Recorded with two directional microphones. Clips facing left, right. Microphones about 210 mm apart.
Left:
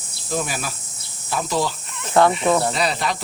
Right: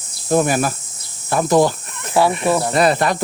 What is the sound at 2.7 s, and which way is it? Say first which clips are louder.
Speech: right 7 dB; 55° right (ahead or behind).